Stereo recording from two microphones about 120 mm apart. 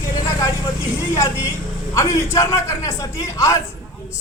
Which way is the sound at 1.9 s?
25° left (ahead or behind).